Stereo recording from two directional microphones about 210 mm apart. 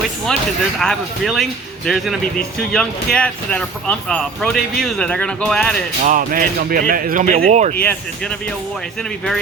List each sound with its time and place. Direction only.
0.3 s speech: 5° left (ahead or behind)
6.0 s speech: 35° right (ahead or behind)
7.8 s speech: 5° left (ahead or behind)